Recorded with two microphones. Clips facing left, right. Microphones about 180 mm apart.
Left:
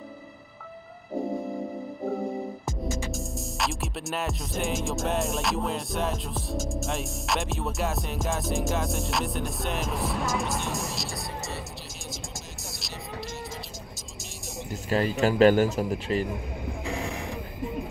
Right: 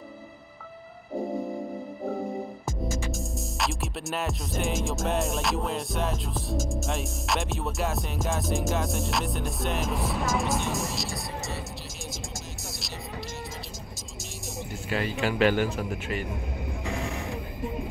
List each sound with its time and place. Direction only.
3.1 s music: centre (ahead or behind)
14.7 s a man's voice: 40° left (ahead or behind)